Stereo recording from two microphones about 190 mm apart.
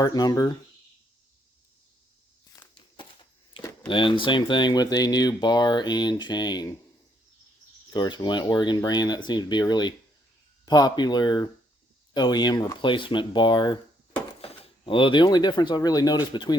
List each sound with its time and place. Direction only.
0.0 s speech: 20° left (ahead or behind)
2.6 s a sound: 25° left (ahead or behind)
3.6 s speech: 25° left (ahead or behind)
7.9 s speech: 20° left (ahead or behind)